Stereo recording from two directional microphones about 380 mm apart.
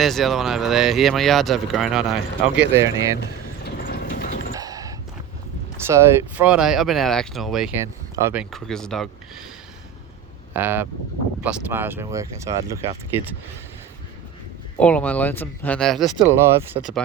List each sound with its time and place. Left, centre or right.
0.0 s speech: centre
3.6 s clip-clop: left
4.5 s a sound: centre
5.9 s speech: centre
10.5 s speech: centre
14.8 s speech: centre